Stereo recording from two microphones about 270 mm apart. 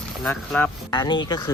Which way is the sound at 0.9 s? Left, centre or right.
Centre.